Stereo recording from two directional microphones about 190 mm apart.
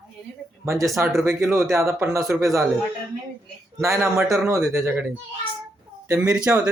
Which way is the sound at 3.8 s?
15° right (ahead or behind).